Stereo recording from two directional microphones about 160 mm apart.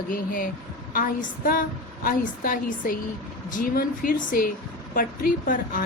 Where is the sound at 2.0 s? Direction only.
65° left (ahead or behind).